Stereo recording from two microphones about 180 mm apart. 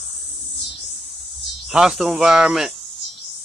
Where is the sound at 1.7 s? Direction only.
Centre (ahead or behind).